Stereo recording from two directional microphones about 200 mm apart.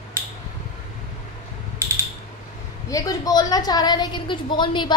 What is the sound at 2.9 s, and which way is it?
Speech, 15° left (ahead or behind).